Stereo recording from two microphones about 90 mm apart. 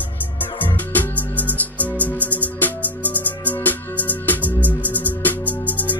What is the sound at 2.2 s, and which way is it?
Music, 20° right (ahead or behind).